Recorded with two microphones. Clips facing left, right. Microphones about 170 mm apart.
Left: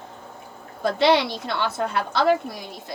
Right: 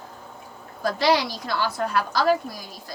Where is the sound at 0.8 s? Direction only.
25° left (ahead or behind).